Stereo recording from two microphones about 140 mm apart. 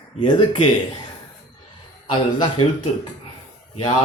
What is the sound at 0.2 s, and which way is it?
Speech, 35° left (ahead or behind).